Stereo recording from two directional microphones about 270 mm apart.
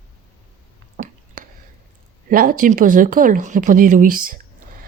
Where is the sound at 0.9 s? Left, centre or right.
Right.